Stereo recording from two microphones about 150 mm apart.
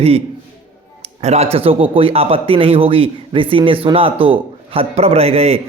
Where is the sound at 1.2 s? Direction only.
45° right (ahead or behind).